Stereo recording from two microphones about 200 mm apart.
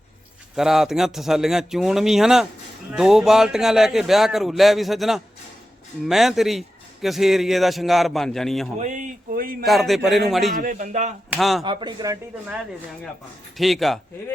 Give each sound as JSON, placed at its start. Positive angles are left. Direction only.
{"t": 0.5, "sound": "a man's voice", "side_deg": 0}
{"t": 8.8, "sound": "speech", "side_deg": -40}
{"t": 9.6, "sound": "a man's voice", "side_deg": 0}
{"t": 10.6, "sound": "speech", "side_deg": -40}
{"t": 11.3, "sound": "a man's voice", "side_deg": 0}
{"t": 11.6, "sound": "speech", "side_deg": -25}
{"t": 13.6, "sound": "a man's voice", "side_deg": 0}